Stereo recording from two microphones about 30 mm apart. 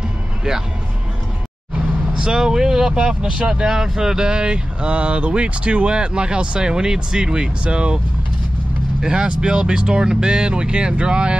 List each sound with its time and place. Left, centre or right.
2.1 s speech: centre
3.6 s speech: centre
4.8 s speech: right
6.6 s speech: right
7.6 s speech: right
9.0 s speech: right